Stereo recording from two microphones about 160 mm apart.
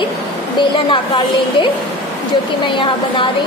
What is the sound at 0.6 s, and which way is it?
A woman's voice, 30° left (ahead or behind).